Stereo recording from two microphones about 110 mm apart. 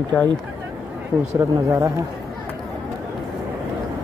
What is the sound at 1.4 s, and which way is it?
Speech, 30° right (ahead or behind).